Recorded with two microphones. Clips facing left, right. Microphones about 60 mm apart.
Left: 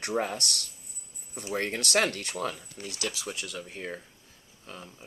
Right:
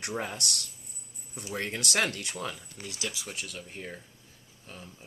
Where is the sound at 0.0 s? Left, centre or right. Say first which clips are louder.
Left 4 dB; left.